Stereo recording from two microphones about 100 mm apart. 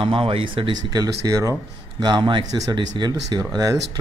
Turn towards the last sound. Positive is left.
turn(degrees=-40)  # may be behind; listen again after turning